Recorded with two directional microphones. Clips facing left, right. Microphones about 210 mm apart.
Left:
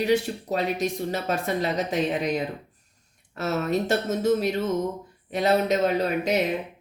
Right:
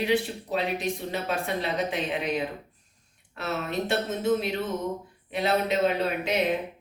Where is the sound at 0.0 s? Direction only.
45° left (ahead or behind).